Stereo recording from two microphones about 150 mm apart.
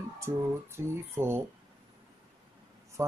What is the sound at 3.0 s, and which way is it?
Speech, 20° right (ahead or behind).